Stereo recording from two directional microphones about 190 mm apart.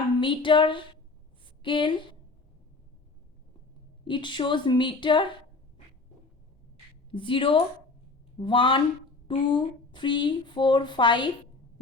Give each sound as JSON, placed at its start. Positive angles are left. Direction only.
{"t": 0.2, "sound": "speech", "side_deg": 25}
{"t": 4.0, "sound": "speech", "side_deg": 25}
{"t": 7.1, "sound": "speech", "side_deg": 25}